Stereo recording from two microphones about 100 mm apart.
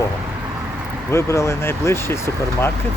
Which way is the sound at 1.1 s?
30° left (ahead or behind).